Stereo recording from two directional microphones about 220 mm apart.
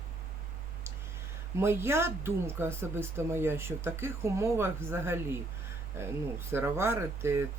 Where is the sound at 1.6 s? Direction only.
10° right (ahead or behind).